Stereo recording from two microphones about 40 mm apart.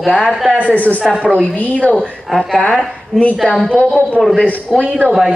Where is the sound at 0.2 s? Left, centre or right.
Centre.